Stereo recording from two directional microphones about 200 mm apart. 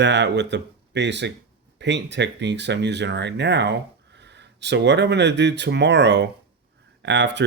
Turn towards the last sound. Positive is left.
turn(degrees=-60)  # may be behind; listen again after turning